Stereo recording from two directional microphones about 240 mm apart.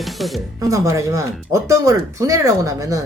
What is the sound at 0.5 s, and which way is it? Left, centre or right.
Speech, centre.